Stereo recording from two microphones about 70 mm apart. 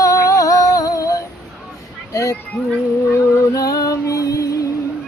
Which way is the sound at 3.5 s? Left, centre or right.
Left.